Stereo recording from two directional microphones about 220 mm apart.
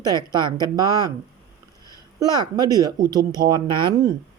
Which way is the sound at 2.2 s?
20° right (ahead or behind).